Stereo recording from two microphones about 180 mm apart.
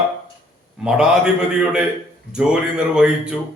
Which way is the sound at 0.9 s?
5° right (ahead or behind).